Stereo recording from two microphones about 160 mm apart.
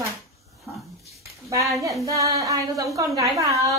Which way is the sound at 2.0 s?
20° right (ahead or behind).